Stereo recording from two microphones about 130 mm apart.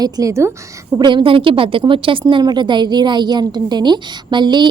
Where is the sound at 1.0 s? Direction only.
40° right (ahead or behind).